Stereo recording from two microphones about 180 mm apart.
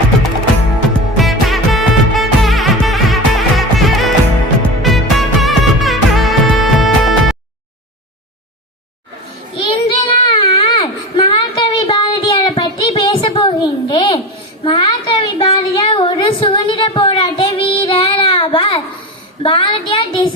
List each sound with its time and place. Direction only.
1.1 s music: centre (ahead or behind)
9.6 s child singing: 30° left (ahead or behind)
14.6 s a sound: 30° left (ahead or behind)